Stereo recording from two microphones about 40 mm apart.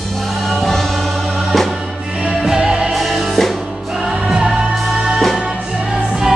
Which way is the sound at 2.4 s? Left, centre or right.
Centre.